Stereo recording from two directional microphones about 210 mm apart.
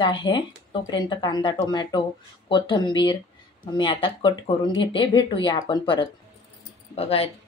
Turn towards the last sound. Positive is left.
turn(degrees=30)  # may be behind; listen again after turning